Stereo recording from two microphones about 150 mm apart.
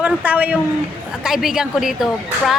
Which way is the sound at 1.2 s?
5° right (ahead or behind).